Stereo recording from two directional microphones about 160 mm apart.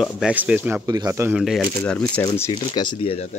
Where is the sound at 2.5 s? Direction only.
30° left (ahead or behind).